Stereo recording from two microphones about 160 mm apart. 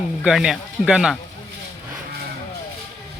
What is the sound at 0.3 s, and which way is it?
Speech, 5° right (ahead or behind).